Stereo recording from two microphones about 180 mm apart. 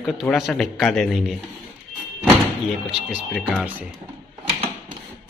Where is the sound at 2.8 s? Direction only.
Centre (ahead or behind).